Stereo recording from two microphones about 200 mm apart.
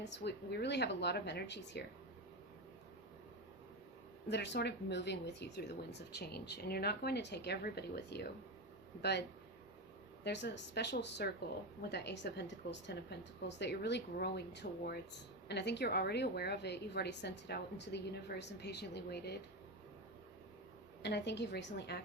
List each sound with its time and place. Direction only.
0.0 s speech: 60° left (ahead or behind)
4.3 s speech: 60° left (ahead or behind)
10.2 s speech: 60° left (ahead or behind)
21.0 s speech: 60° left (ahead or behind)